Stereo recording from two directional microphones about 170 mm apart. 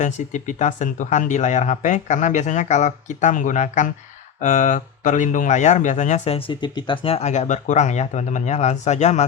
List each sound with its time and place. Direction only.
0.0 s speech: 45° left (ahead or behind)